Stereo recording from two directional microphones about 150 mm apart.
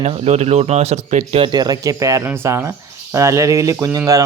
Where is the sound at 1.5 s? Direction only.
25° right (ahead or behind).